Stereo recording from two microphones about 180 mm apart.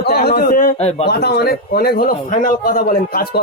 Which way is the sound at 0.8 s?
35° left (ahead or behind).